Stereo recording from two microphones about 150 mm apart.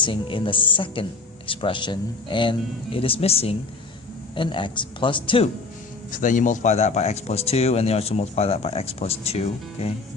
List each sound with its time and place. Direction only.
0.0 s speech: 35° left (ahead or behind)
6.1 s speech: 60° left (ahead or behind); by 9.9 s 45° left (ahead or behind)